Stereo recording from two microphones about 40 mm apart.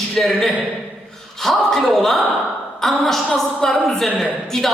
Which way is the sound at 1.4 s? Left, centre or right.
Centre.